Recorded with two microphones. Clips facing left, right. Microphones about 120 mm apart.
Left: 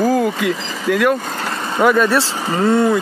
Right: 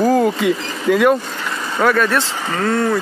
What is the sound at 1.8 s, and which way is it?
Speech, 20° left (ahead or behind).